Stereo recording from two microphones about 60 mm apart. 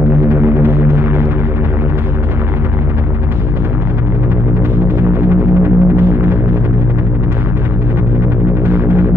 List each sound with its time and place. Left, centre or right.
0.3 s music: right
4.8 s music: right
8.6 s music: right